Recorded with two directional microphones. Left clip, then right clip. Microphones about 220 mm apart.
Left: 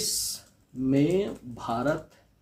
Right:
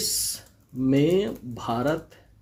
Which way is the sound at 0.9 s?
45° right (ahead or behind).